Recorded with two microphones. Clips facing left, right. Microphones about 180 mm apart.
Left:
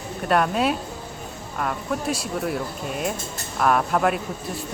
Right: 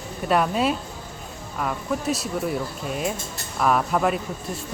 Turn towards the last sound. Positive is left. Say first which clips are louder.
# left 1 dB
turn(degrees=0)  # may be behind; listen again after turning